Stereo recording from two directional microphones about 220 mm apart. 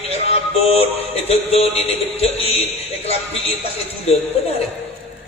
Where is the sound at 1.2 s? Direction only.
30° left (ahead or behind).